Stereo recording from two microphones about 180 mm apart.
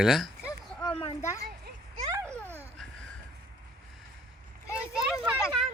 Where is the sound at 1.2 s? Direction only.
15° left (ahead or behind).